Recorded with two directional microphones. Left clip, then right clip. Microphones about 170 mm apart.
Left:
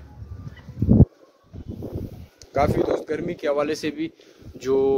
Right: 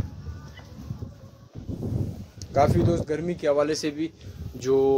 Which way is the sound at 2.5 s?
5° left (ahead or behind).